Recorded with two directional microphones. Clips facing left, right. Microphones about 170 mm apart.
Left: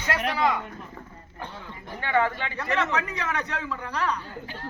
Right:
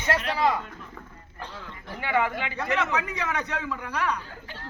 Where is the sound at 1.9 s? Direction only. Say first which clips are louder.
Left 1 dB; 10° right (ahead or behind).